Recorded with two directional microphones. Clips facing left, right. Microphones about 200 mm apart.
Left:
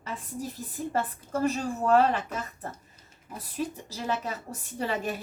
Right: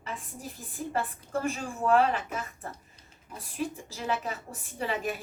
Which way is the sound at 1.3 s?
40° left (ahead or behind).